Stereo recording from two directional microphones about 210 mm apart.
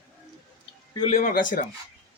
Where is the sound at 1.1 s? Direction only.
40° left (ahead or behind).